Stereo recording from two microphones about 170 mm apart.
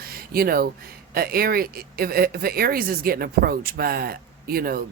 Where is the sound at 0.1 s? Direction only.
60° right (ahead or behind).